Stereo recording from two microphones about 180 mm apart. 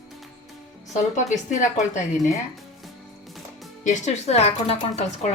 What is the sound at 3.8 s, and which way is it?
A woman's voice, 40° left (ahead or behind).